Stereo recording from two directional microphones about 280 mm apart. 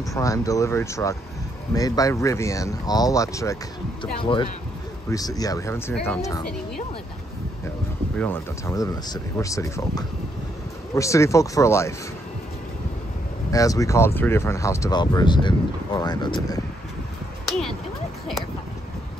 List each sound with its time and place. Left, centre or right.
0.1 s speech: centre
8.2 s speech: centre
13.5 s speech: centre
17.5 s a sound: centre